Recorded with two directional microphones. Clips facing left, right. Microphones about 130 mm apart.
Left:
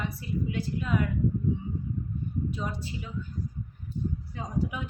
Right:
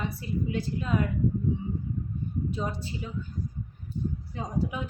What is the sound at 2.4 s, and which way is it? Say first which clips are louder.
Speech: right 2 dB; 25° right (ahead or behind).